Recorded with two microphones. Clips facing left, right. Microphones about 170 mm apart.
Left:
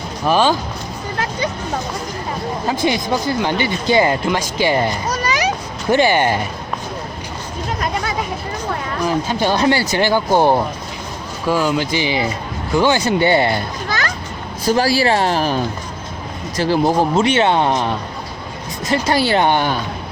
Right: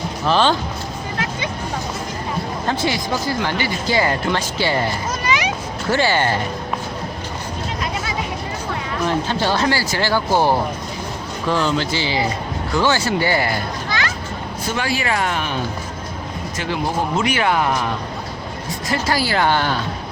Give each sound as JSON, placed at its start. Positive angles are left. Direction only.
{"t": 0.3, "sound": "speech", "side_deg": 10}
{"t": 2.6, "sound": "speech", "side_deg": 15}
{"t": 5.0, "sound": "a sound", "side_deg": 40}
{"t": 5.9, "sound": "speech", "side_deg": 15}
{"t": 9.0, "sound": "speech", "side_deg": 10}
{"t": 14.7, "sound": "speech", "side_deg": 35}
{"t": 16.6, "sound": "speech", "side_deg": 35}
{"t": 18.9, "sound": "speech", "side_deg": 25}